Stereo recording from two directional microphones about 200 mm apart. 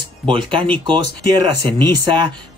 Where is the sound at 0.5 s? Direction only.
25° right (ahead or behind).